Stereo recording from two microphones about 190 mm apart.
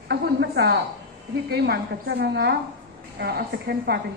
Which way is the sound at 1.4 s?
60° right (ahead or behind).